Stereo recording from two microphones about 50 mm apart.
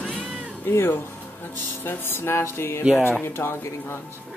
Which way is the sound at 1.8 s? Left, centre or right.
Left.